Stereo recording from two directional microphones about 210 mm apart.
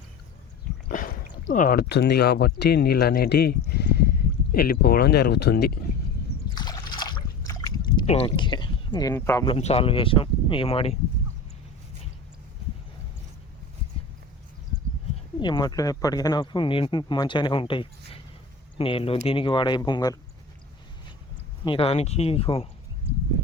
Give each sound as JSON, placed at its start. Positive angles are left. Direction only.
{"t": 0.9, "sound": "speech", "side_deg": 40}
{"t": 6.5, "sound": "a sound", "side_deg": 20}
{"t": 9.6, "sound": "speech", "side_deg": 30}
{"t": 15.4, "sound": "speech", "side_deg": 20}
{"t": 21.6, "sound": "speech", "side_deg": 25}